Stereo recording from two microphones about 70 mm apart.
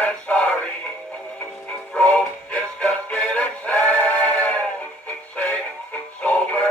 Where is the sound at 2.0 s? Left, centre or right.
Centre.